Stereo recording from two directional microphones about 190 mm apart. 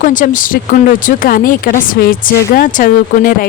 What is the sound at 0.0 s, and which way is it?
Speech, 45° left (ahead or behind).